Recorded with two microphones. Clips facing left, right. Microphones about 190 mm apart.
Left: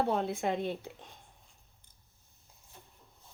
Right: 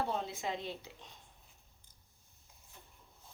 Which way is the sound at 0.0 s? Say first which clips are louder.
Left 7 dB; 60° left (ahead or behind).